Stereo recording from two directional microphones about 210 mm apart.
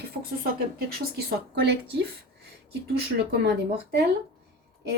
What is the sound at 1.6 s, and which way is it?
A woman's voice, 55° right (ahead or behind).